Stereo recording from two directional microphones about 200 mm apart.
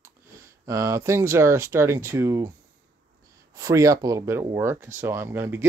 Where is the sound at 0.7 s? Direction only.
15° right (ahead or behind).